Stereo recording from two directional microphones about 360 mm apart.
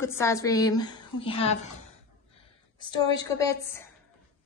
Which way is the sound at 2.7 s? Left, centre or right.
Centre.